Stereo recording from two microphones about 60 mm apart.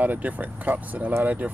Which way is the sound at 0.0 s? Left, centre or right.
Right.